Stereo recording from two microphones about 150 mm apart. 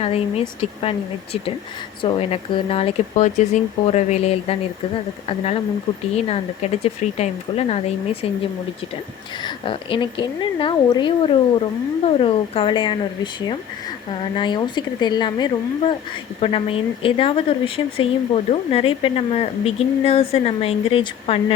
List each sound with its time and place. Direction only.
0.0 s speech: 40° left (ahead or behind)
9.4 s speech: 35° left (ahead or behind)